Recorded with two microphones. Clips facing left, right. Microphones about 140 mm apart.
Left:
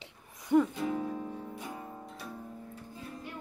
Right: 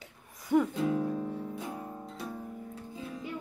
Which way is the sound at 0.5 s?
10° right (ahead or behind).